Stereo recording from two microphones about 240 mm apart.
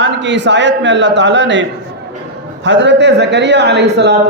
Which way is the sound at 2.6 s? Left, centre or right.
Right.